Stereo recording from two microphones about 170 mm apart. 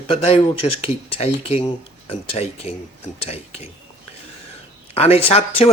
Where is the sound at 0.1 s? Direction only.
35° left (ahead or behind).